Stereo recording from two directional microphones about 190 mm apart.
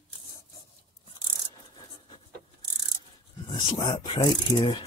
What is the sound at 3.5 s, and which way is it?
Speech, 25° left (ahead or behind).